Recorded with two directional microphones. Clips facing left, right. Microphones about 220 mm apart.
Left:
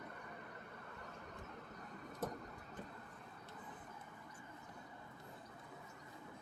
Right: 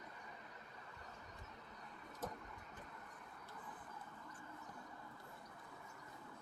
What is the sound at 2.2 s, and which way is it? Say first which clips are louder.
Train: left 4 dB; 55° left (ahead or behind).